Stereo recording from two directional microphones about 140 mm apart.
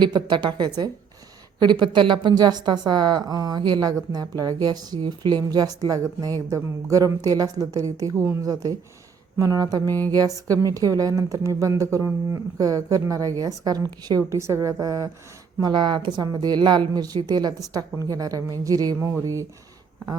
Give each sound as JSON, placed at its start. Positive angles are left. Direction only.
{"t": 0.0, "sound": "a woman's voice", "side_deg": -30}